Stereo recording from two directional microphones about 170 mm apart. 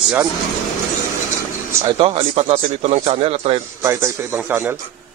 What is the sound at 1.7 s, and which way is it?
Speech, 15° right (ahead or behind).